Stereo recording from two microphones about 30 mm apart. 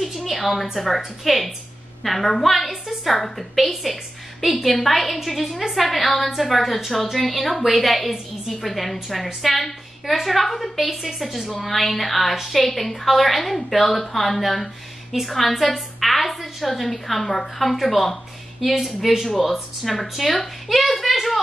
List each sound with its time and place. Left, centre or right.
0.0 s a woman's voice: centre
20.2 s a woman's voice: centre